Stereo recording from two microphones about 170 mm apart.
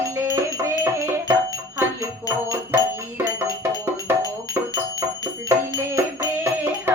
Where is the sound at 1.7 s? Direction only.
20° right (ahead or behind).